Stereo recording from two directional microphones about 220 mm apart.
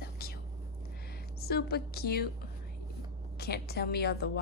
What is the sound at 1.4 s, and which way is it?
Speech, 45° left (ahead or behind).